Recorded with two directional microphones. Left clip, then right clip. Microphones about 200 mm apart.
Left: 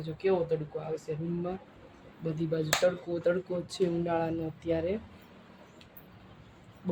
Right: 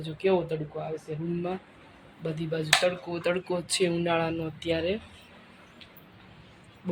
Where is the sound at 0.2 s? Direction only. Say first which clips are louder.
Right 3 dB; 35° right (ahead or behind).